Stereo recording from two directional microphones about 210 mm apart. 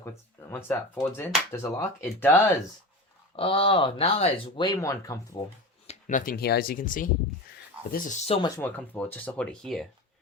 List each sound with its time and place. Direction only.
0.5 s speech: 10° left (ahead or behind)
3.3 s speech: 25° left (ahead or behind)
5.9 s speech: 35° left (ahead or behind)
8.4 s speech: 15° left (ahead or behind)